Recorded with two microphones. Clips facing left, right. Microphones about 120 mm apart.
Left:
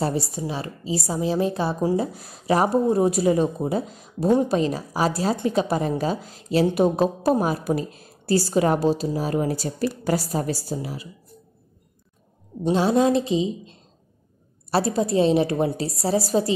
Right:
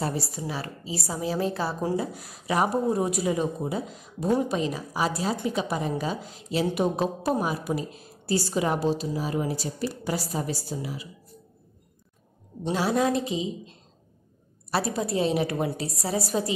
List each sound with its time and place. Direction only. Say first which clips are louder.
0.0 s a woman's voice: left 5 dB; 25° left (ahead or behind)
2.0 s a woman's voice: left 4 dB; 35° left (ahead or behind)
12.7 s a woman's voice: left 5 dB; 25° left (ahead or behind)
14.7 s a woman's voice: left 5 dB; 30° left (ahead or behind)